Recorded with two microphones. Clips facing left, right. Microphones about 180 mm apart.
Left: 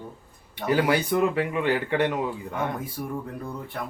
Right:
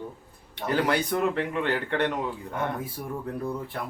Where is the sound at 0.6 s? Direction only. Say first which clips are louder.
Left 3 dB; 10° left (ahead or behind).